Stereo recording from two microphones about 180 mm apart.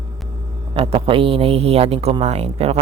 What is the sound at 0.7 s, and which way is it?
Speech, 30° right (ahead or behind).